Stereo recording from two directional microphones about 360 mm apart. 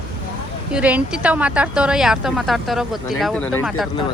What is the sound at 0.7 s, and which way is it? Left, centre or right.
A woman's voice, centre.